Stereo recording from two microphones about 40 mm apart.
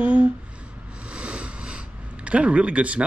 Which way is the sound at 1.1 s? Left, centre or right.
Right.